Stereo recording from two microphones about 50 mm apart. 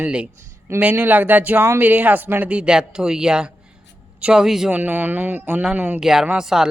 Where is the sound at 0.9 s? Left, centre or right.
Right.